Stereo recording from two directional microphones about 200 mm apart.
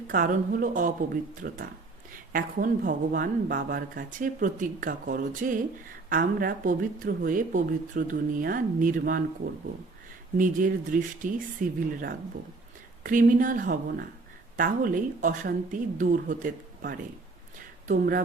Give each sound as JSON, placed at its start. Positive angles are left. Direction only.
{"t": 0.1, "sound": "speech", "side_deg": -45}
{"t": 10.3, "sound": "speech", "side_deg": -40}